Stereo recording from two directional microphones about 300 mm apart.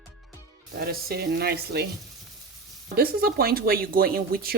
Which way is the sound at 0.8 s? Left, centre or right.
Right.